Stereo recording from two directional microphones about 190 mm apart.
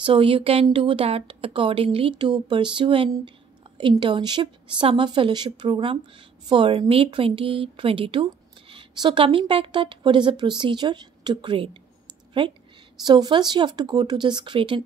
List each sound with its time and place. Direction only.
0.0 s speech: 30° right (ahead or behind)